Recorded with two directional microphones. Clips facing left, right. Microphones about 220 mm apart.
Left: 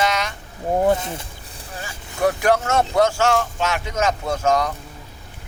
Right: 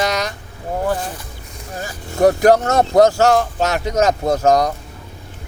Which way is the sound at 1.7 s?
40° right (ahead or behind).